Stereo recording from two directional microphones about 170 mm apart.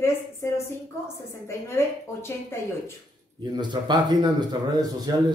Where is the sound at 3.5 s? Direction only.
25° right (ahead or behind).